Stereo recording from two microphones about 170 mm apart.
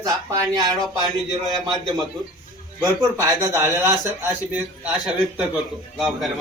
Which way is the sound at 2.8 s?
25° right (ahead or behind).